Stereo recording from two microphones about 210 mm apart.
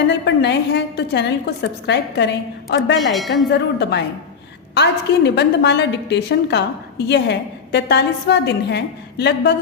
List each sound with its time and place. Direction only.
0.1 s a woman's voice: 55° left (ahead or behind)
3.1 s speech: centre (ahead or behind)
3.5 s a woman's voice: 55° left (ahead or behind)